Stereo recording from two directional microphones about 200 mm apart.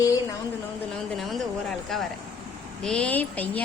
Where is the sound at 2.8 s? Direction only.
5° left (ahead or behind).